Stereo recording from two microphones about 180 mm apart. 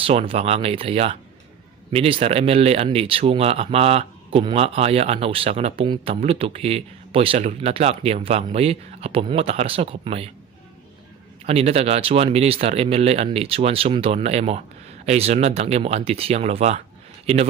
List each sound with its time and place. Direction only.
0.0 s speech: 30° right (ahead or behind)
11.4 s speech: 35° right (ahead or behind)